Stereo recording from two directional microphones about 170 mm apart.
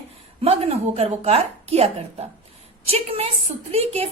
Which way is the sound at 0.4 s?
35° right (ahead or behind).